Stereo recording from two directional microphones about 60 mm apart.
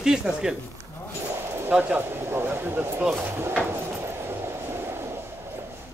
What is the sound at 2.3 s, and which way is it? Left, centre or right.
Speech, right.